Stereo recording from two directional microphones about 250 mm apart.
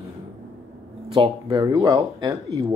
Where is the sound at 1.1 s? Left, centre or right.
Centre.